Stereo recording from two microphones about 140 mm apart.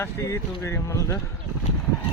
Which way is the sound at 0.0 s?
20° left (ahead or behind).